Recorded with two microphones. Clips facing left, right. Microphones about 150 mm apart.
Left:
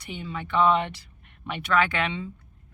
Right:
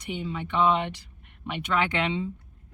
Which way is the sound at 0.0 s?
20° right (ahead or behind).